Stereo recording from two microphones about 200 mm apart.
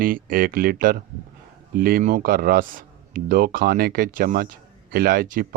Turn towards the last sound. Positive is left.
turn(degrees=-45)  # may be behind; listen again after turning